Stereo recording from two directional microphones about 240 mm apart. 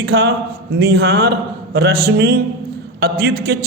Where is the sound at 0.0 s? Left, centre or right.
Right.